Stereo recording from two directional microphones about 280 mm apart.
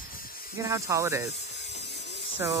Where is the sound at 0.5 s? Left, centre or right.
Centre.